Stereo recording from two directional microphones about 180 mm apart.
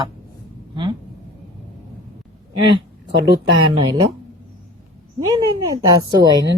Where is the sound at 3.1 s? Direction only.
85° right.